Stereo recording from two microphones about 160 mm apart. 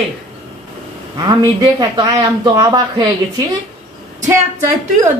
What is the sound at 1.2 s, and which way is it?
A man's voice, 25° right (ahead or behind).